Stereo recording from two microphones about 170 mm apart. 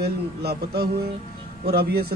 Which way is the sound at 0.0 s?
65° right (ahead or behind).